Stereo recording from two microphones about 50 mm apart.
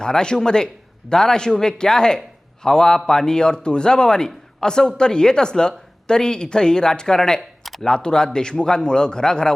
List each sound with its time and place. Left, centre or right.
0.0 s a man's voice: centre